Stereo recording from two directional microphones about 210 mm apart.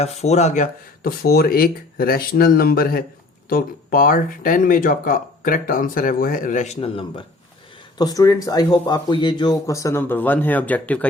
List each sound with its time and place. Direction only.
0.0 s speech: 30° left (ahead or behind)
6.7 s speech: 25° left (ahead or behind); by 11.0 s 5° left (ahead or behind)